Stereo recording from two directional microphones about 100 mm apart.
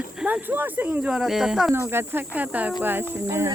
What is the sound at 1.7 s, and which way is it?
Speech, 20° right (ahead or behind).